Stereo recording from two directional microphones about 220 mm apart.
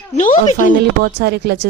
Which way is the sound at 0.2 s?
35° left (ahead or behind).